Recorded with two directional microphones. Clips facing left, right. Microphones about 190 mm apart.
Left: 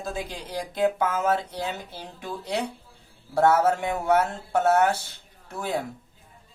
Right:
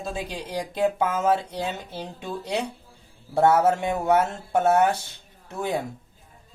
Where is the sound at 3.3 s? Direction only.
20° right (ahead or behind).